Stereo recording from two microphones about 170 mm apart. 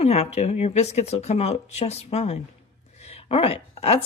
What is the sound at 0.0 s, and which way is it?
A woman's voice, 40° left (ahead or behind).